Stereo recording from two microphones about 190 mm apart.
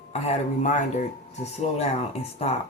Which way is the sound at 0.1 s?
35° left (ahead or behind).